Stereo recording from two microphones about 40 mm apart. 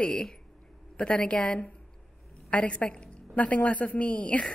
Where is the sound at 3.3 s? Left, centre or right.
Left.